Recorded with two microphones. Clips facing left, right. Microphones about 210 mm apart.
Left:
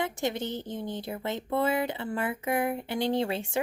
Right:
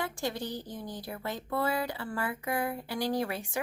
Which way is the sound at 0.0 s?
20° left (ahead or behind).